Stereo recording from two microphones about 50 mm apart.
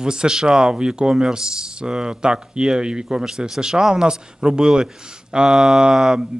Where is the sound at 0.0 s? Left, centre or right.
Centre.